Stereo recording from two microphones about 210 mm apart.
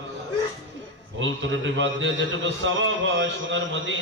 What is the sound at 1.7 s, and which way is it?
A man's voice, 60° right (ahead or behind).